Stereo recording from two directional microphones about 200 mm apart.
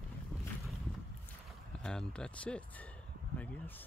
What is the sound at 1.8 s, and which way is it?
Speech, 5° left (ahead or behind).